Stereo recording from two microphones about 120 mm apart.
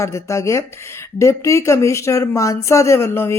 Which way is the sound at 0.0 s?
25° left (ahead or behind).